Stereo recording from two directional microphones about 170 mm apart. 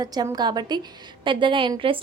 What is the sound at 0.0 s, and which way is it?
A woman's voice, 20° right (ahead or behind).